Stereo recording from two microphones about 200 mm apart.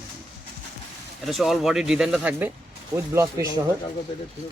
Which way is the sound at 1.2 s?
Centre (ahead or behind).